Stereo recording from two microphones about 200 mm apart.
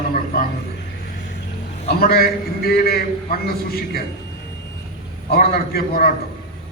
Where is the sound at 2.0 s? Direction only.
50° left (ahead or behind).